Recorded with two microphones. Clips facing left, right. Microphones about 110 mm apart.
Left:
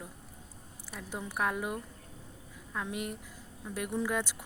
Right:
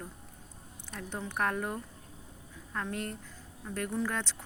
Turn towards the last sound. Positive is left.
turn(degrees=10)  # may be behind; listen again after turning